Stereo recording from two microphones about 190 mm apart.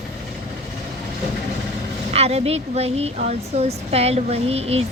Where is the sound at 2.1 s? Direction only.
35° right (ahead or behind).